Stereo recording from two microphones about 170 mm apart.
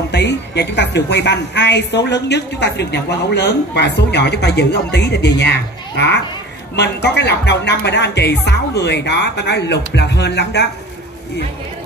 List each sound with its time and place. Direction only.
0.1 s a woman's voice: 90° left